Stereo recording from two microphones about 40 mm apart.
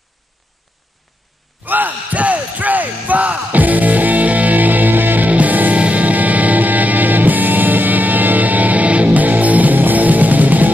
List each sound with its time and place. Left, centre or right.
1.7 s music: right